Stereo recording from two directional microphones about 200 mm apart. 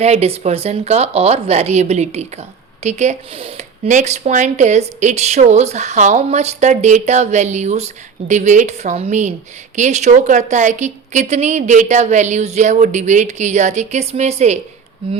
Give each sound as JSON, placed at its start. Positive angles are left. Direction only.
{"t": 0.0, "sound": "speech", "side_deg": -30}